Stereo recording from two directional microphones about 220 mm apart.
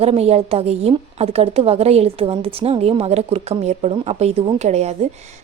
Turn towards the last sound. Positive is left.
turn(degrees=-30)  # may be behind; listen again after turning